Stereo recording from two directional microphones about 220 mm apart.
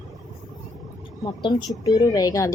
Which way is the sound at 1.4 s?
20° left (ahead or behind).